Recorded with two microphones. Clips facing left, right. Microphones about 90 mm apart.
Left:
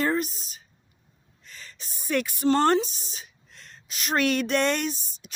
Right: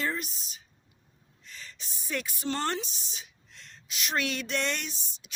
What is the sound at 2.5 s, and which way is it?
A woman's voice, 40° left (ahead or behind).